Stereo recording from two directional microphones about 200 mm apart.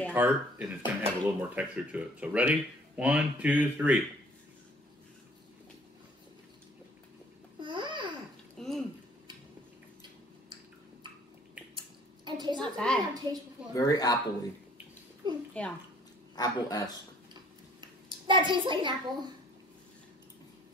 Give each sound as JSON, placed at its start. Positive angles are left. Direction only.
{"t": 0.1, "sound": "speech", "side_deg": -10}
{"t": 7.5, "sound": "babbling", "side_deg": -25}
{"t": 8.5, "sound": "a sound", "side_deg": 0}
{"t": 12.3, "sound": "a sound", "side_deg": -20}
{"t": 12.5, "sound": "a woman's voice", "side_deg": 5}
{"t": 13.1, "sound": "a woman's voice", "side_deg": -20}
{"t": 13.7, "sound": "speech", "side_deg": 20}
{"t": 15.2, "sound": "a woman's voice", "side_deg": -20}
{"t": 16.3, "sound": "speech", "side_deg": 20}
{"t": 17.3, "sound": "a sound", "side_deg": -20}